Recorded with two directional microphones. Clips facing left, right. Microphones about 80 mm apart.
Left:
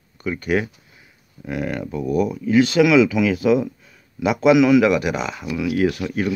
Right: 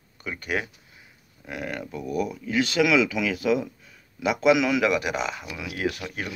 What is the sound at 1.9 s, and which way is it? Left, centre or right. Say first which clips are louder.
Speech: left 8 dB; left.